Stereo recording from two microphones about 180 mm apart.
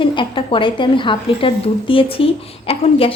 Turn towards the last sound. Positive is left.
turn(degrees=30)  # may be behind; listen again after turning